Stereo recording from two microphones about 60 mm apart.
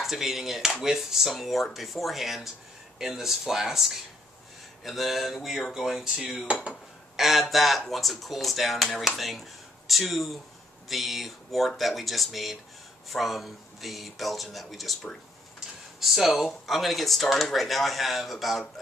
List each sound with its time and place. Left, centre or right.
0.0 s speech: centre
6.7 s speech: centre